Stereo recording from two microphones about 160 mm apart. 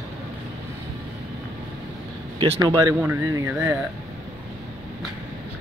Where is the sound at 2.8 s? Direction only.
10° right (ahead or behind).